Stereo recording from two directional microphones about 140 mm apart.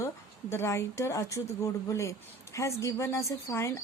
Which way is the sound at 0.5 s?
20° left (ahead or behind).